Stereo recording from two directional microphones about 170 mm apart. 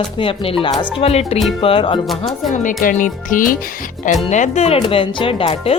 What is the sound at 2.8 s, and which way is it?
Speech, 50° left (ahead or behind).